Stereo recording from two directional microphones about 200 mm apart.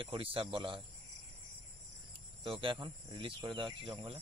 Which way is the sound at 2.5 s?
25° right (ahead or behind).